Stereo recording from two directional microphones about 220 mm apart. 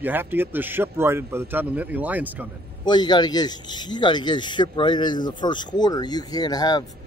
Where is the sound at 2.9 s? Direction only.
20° left (ahead or behind).